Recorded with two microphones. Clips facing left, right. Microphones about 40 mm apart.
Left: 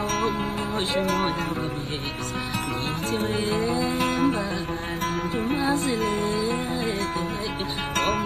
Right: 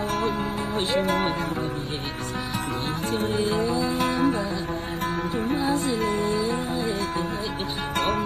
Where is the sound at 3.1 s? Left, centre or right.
Left.